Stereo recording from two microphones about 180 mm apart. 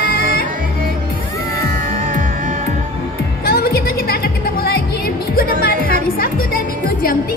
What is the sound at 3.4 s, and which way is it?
Music, 60° left (ahead or behind).